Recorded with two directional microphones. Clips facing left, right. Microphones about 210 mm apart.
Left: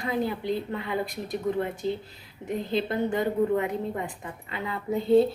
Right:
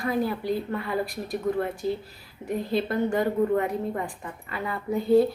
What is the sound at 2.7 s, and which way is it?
A woman's voice, 20° left (ahead or behind).